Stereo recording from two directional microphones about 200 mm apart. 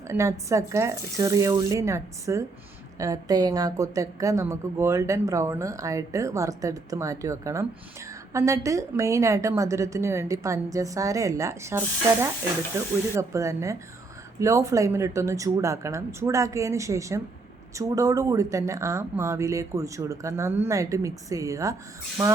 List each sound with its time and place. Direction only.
0.1 s a woman's voice: 15° right (ahead or behind)